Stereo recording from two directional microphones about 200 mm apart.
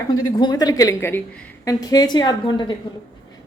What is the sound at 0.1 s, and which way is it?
A woman's voice, 20° left (ahead or behind).